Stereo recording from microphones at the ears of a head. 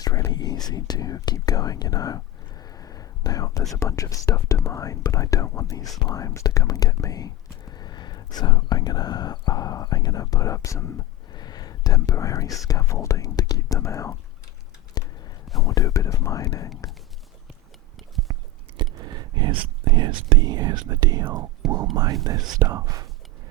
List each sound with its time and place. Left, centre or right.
0.0 s speech: left
15.5 s speech: left
18.8 s speech: right